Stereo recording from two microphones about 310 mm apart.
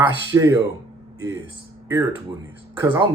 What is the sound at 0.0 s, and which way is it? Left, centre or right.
Speech, centre.